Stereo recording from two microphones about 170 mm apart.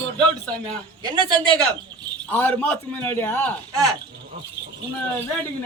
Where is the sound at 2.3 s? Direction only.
10° left (ahead or behind).